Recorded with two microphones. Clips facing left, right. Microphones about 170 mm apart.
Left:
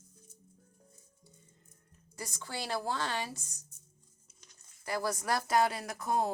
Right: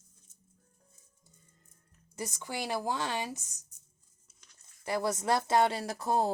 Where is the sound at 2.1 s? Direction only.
20° right (ahead or behind).